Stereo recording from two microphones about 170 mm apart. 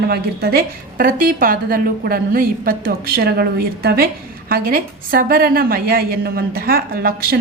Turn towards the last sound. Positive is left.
turn(degrees=-60)  # may be behind; listen again after turning